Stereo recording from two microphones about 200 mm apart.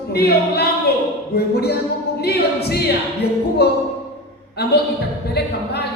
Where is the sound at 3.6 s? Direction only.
55° left (ahead or behind).